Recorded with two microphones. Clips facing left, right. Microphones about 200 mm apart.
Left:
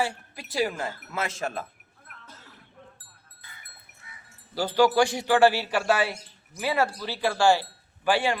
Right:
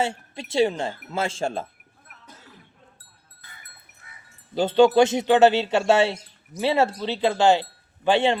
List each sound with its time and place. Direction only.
0.0 s speech: 25° right (ahead or behind)
4.0 s wind chime: 50° right (ahead or behind)
4.5 s speech: 25° right (ahead or behind)